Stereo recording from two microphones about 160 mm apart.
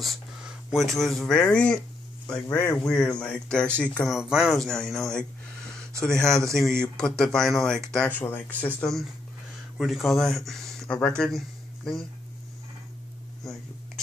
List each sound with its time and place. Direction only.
0.0 s speech: centre (ahead or behind)
2.3 s a man's voice: 25° left (ahead or behind)
2.6 s speech: 10° left (ahead or behind)
9.8 s speech: centre (ahead or behind)